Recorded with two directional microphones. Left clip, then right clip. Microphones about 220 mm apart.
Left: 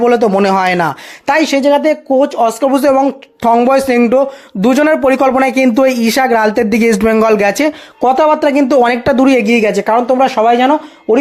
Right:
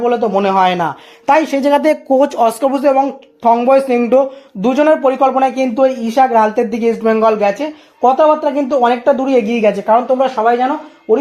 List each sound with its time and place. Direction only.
0.0 s a man's voice: 30° left (ahead or behind)
1.6 s a man's voice: centre (ahead or behind); by 9.4 s 35° left (ahead or behind)
9.4 s a man's voice: 20° left (ahead or behind)